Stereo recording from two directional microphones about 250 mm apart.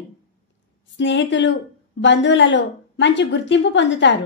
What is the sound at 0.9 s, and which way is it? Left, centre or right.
A woman's voice, left.